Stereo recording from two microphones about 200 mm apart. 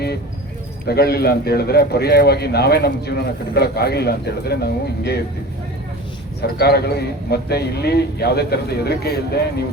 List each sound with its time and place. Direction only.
0.9 s speech: 50° left (ahead or behind)
6.4 s speech: 50° left (ahead or behind)